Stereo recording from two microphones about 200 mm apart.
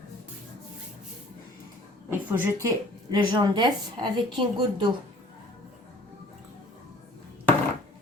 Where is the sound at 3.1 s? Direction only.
20° right (ahead or behind).